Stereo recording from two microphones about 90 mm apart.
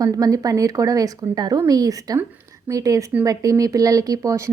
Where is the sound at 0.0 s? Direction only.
40° right (ahead or behind).